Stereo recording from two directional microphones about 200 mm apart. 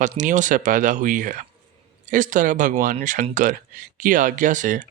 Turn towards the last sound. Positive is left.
turn(degrees=-40)  # may be behind; listen again after turning